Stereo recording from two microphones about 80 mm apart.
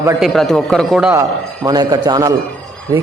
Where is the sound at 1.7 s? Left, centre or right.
Right.